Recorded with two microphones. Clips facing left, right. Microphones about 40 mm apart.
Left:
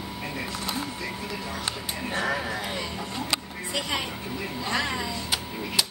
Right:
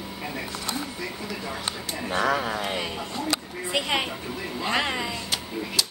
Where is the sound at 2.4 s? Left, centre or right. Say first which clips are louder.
Right 3 dB; right.